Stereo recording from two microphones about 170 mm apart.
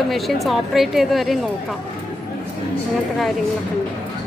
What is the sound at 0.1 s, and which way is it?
A woman's voice, centre (ahead or behind).